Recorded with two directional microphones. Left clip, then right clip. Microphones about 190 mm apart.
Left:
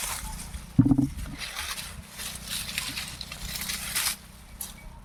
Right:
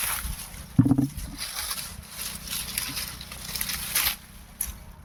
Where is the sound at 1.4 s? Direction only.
70° right (ahead or behind).